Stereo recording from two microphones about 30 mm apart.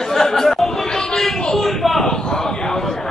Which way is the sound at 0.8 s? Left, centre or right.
Left.